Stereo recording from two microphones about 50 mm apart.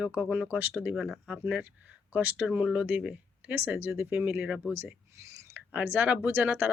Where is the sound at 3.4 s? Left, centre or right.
Right.